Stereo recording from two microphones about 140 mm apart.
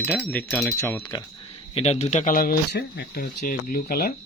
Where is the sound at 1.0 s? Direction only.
25° left (ahead or behind).